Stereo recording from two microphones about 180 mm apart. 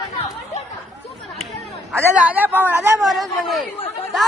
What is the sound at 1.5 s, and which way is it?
Speech, 5° right (ahead or behind).